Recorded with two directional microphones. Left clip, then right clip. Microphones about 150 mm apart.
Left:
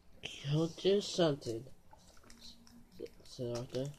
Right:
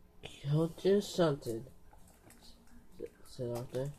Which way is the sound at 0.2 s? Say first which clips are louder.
Right 1 dB; 5° left (ahead or behind).